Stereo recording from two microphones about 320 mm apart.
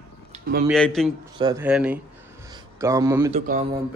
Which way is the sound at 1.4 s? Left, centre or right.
Centre.